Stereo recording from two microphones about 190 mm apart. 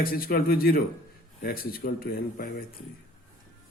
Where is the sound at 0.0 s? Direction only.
50° left (ahead or behind).